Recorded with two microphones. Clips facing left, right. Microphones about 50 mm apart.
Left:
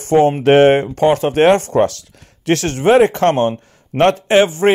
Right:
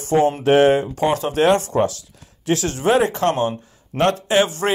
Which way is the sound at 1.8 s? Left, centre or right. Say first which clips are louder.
Left 4 dB; left.